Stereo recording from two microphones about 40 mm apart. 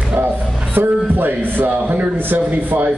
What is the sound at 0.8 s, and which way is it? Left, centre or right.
A man's voice, right.